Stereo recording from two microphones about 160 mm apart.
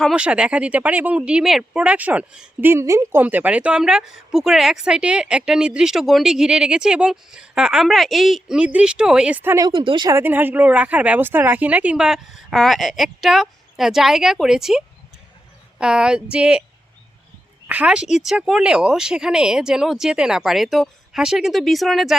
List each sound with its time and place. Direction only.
0.0 s speech: 5° right (ahead or behind)
9.6 s speech: 30° right (ahead or behind)
10.1 s speech: 15° right (ahead or behind)
17.7 s speech: 10° right (ahead or behind)